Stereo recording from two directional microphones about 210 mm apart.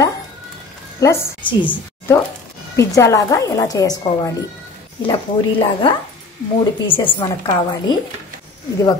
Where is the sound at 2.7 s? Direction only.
15° left (ahead or behind).